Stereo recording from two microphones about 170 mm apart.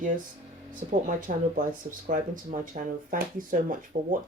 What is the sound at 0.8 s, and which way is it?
Speech, 65° right (ahead or behind).